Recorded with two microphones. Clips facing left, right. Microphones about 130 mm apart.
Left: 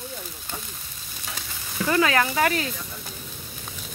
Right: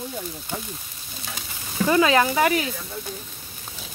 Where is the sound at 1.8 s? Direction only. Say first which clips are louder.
Right 3 dB; 20° right (ahead or behind).